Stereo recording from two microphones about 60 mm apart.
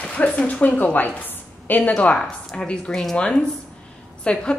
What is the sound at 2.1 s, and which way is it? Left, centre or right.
A woman's voice, centre.